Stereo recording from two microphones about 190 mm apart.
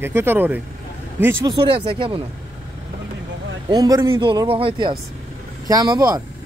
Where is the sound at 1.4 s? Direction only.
25° right (ahead or behind).